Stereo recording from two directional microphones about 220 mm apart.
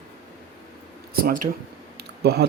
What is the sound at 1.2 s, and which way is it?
Speech, 40° right (ahead or behind).